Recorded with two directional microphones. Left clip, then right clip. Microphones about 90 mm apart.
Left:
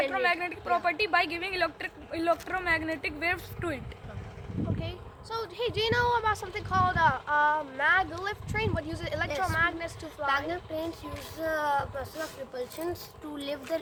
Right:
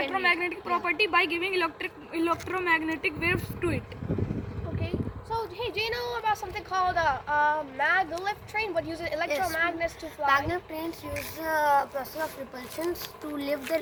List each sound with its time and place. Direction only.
0.0 s a woman's voice: 50° left (ahead or behind)
0.9 s a woman's voice: 75° left (ahead or behind)
5.5 s speech: 55° left (ahead or behind); by 10.1 s 40° left (ahead or behind)
10.2 s a woman's voice: centre (ahead or behind)
11.3 s speech: 15° left (ahead or behind)
12.9 s a child's voice: 40° left (ahead or behind)